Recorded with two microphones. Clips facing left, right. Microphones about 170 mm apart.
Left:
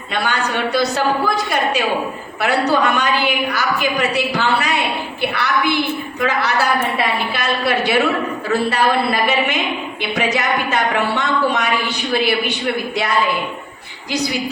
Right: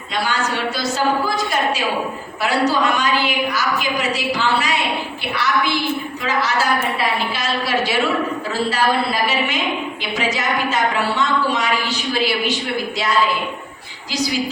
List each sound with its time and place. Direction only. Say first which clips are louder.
0.1 s a woman's voice: left 1 dB; 60° left (ahead or behind)
2.4 s a woman's voice: left 2 dB; 60° left (ahead or behind)
10.0 s a woman's voice: left 6 dB; 60° left (ahead or behind)